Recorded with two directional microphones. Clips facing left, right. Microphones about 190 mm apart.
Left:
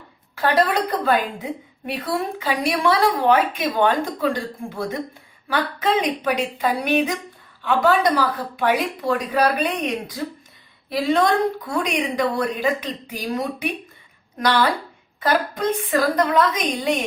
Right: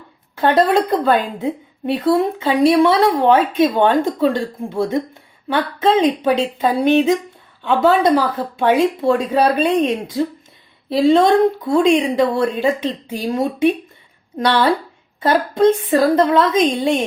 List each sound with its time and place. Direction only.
0.3 s speech: 25° right (ahead or behind)
1.9 s speech: 25° right (ahead or behind)
6.0 s speech: 25° right (ahead or behind)